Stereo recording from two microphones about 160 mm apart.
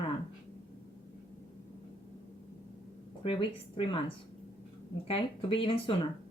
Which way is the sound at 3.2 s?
35° left (ahead or behind).